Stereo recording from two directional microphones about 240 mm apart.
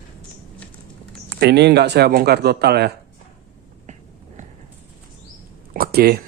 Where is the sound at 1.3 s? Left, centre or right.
Right.